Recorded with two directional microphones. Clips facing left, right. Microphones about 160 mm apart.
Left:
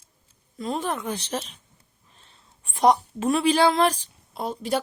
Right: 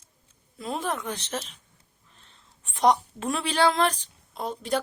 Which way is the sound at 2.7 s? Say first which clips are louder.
Left 2 dB; 5° left (ahead or behind).